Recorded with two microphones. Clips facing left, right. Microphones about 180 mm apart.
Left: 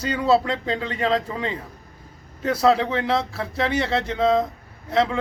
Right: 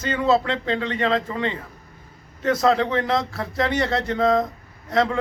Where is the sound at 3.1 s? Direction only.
5° left (ahead or behind).